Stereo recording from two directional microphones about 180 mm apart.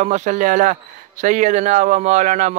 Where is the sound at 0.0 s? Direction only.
40° right (ahead or behind).